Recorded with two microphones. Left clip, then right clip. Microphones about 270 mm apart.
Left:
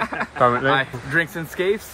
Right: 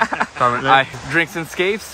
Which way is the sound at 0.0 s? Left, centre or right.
Right.